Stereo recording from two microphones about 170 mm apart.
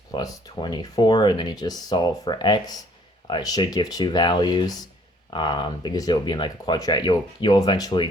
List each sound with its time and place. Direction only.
0.1 s speech: 20° left (ahead or behind)